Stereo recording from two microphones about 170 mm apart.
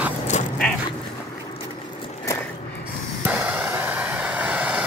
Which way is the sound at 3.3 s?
10° right (ahead or behind).